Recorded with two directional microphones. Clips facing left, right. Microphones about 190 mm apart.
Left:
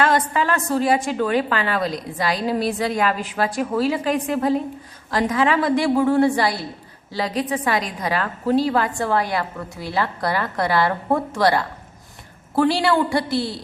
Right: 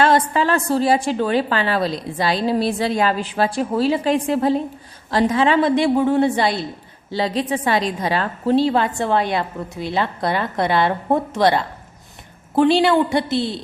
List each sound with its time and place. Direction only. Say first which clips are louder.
0.0 s a woman's voice: right 3 dB; 30° right (ahead or behind)